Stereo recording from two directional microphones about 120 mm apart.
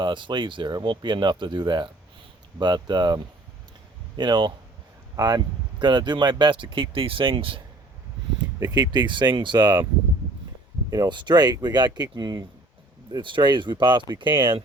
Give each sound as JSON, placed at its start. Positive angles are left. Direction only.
{"t": 0.0, "sound": "speech", "side_deg": -40}
{"t": 4.2, "sound": "speech", "side_deg": -40}
{"t": 8.6, "sound": "speech", "side_deg": -35}
{"t": 11.1, "sound": "speech", "side_deg": -40}